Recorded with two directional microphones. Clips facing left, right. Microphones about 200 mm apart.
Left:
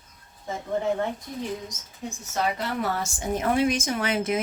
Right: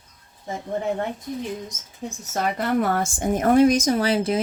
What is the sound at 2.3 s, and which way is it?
A woman's voice, 50° right (ahead or behind).